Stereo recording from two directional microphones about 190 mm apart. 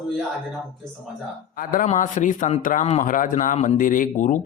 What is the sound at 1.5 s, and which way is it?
A man's voice, 45° left (ahead or behind).